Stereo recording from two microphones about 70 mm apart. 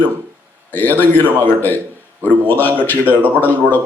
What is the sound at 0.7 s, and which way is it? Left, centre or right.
A man's voice, left.